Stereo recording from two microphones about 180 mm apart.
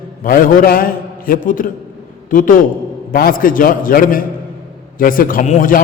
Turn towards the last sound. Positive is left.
turn(degrees=45)  # may be behind; listen again after turning